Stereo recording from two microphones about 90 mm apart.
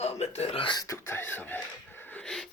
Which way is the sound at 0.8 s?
25° left (ahead or behind).